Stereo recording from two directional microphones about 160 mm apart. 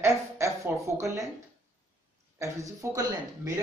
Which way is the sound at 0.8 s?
20° right (ahead or behind).